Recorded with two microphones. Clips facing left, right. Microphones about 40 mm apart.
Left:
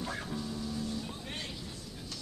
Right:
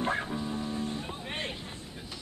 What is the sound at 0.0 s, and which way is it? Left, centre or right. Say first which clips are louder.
Music: right 7 dB; right.